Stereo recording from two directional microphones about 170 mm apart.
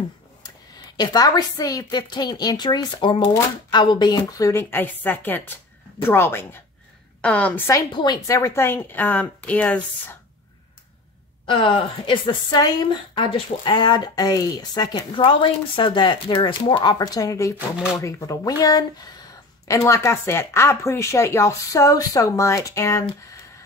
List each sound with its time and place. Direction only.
0.9 s a woman's voice: 25° left (ahead or behind)
7.9 s speech: 25° left (ahead or behind); by 10.1 s 10° left (ahead or behind)
11.4 s a woman's voice: 30° left (ahead or behind)